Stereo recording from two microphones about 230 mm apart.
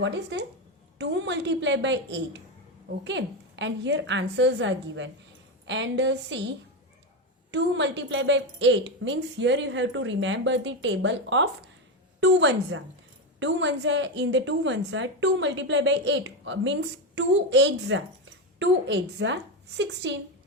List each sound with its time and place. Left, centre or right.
0.0 s a woman's voice: right
7.5 s a woman's voice: right